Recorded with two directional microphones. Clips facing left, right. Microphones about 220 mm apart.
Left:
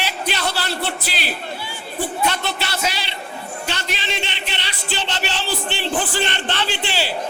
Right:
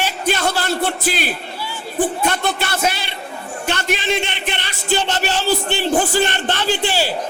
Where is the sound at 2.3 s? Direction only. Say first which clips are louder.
Right 4 dB; 50° right (ahead or behind).